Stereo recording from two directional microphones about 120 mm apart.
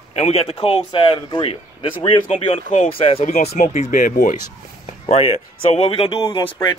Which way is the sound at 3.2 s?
75° left (ahead or behind).